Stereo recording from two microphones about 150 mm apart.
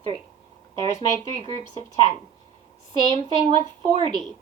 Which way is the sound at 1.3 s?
30° right (ahead or behind).